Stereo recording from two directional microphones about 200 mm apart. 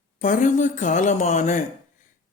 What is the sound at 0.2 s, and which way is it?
Speech, 40° left (ahead or behind).